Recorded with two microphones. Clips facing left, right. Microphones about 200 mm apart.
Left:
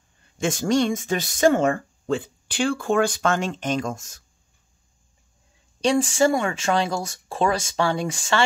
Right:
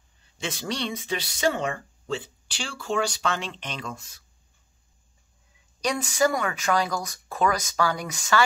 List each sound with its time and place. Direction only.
0.2 s speech: 50° left (ahead or behind)
5.8 s speech: 30° left (ahead or behind)